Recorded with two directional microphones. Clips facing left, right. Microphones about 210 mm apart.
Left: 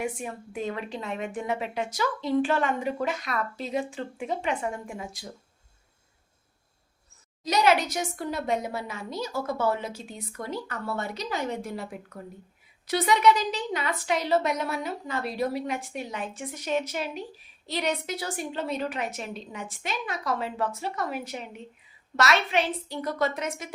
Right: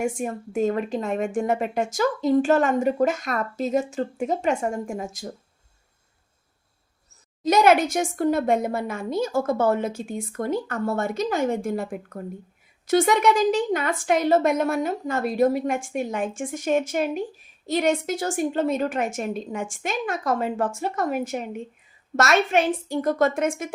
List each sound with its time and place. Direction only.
0.0 s speech: 45° right (ahead or behind)
7.4 s speech: 50° right (ahead or behind)